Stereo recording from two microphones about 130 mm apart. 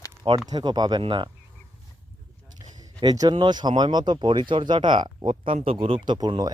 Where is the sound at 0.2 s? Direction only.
30° right (ahead or behind).